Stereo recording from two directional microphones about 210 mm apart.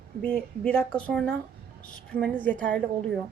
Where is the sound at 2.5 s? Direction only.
40° right (ahead or behind).